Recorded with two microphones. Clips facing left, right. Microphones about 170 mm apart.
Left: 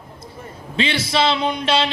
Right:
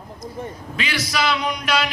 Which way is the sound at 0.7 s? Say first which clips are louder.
Left 6 dB; 25° left (ahead or behind).